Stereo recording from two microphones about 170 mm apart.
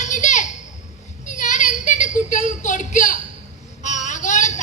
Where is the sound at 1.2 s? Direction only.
45° left (ahead or behind).